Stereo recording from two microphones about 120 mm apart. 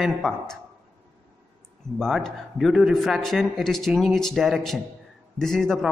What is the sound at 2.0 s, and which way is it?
A man's voice, centre (ahead or behind).